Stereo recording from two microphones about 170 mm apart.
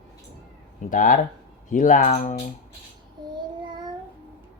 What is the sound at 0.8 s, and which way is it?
Speech, 50° left (ahead or behind).